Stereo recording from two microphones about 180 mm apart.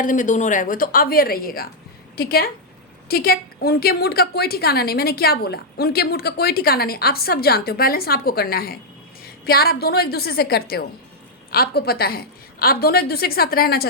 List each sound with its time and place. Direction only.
0.0 s a woman's voice: 45° left (ahead or behind)